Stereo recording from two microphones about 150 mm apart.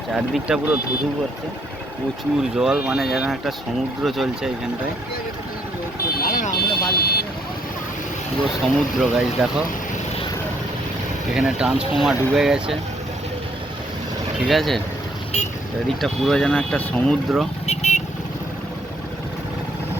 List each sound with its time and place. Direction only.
0.1 s speech: 5° right (ahead or behind)
2.6 s speech: 5° right (ahead or behind)
6.2 s vehicle: 70° left (ahead or behind); by 7.2 s 90° left
8.6 s speech: centre (ahead or behind)
11.3 s speech: 5° right (ahead or behind)
14.4 s speech: centre (ahead or behind)
16.0 s speech: centre (ahead or behind)
17.7 s vehicle: 50° left (ahead or behind)